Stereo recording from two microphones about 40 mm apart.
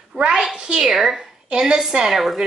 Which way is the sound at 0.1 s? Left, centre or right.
Right.